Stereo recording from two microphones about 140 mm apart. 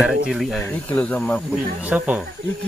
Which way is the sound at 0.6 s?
10° left (ahead or behind).